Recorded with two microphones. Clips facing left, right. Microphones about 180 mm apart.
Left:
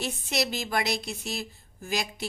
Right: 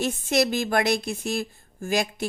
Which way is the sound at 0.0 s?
50° right (ahead or behind).